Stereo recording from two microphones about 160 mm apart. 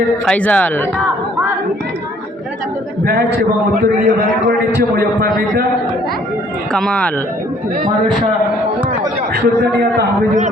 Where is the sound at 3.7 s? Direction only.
65° right (ahead or behind).